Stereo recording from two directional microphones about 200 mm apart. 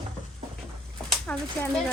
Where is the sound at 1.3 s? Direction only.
10° left (ahead or behind).